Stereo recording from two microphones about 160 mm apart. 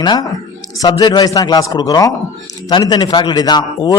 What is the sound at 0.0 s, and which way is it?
A man's voice, 25° left (ahead or behind).